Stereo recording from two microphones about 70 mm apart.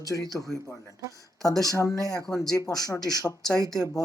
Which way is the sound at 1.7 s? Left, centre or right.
Left.